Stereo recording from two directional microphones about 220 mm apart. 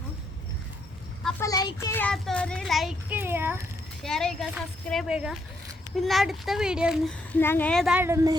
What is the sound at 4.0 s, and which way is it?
A child's voice, centre (ahead or behind).